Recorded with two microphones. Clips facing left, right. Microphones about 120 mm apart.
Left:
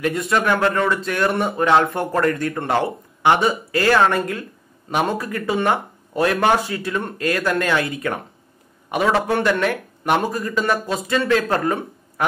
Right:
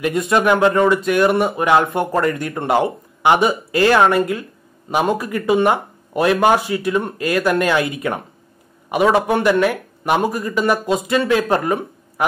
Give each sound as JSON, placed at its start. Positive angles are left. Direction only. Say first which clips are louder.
{"t": 0.0, "sound": "speech", "louder": "right 3 dB", "side_deg": -20}